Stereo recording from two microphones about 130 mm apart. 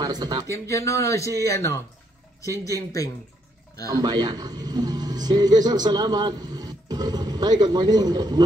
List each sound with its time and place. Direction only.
0.0 s a sound: 30° right (ahead or behind)
0.5 s speech: 25° left (ahead or behind)
3.9 s a man's voice: 30° right (ahead or behind)